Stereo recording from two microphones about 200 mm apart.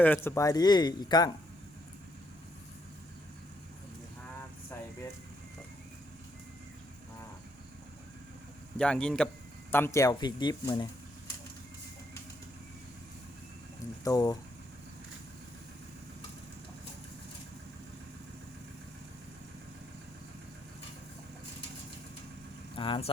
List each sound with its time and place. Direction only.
0.0 s speech: 10° left (ahead or behind)
4.7 s air conditioning: 15° left (ahead or behind)
8.8 s speech: 5° left (ahead or behind); by 10.8 s 20° left (ahead or behind)
14.0 s speech: 20° left (ahead or behind)
22.7 s speech: 25° left (ahead or behind)